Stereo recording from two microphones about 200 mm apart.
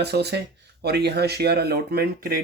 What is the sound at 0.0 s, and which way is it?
Speech, 55° right (ahead or behind).